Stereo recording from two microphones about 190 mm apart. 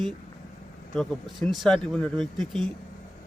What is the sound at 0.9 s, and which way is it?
Speech, centre (ahead or behind).